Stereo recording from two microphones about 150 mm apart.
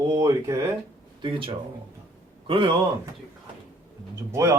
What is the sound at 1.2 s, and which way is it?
Speech, 35° right (ahead or behind).